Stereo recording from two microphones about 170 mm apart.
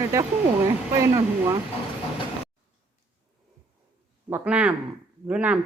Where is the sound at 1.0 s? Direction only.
15° right (ahead or behind).